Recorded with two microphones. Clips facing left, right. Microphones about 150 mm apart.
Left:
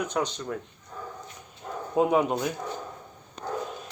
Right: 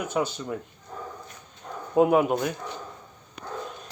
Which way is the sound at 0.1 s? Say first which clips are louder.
Right 2 dB; 5° right (ahead or behind).